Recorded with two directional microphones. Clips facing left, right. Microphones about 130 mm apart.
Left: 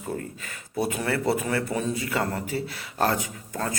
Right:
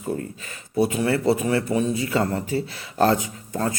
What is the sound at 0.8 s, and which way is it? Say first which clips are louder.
A man's voice: right 5 dB; 25° right (ahead or behind).